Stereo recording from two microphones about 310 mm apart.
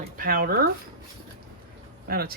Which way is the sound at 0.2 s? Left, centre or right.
Right.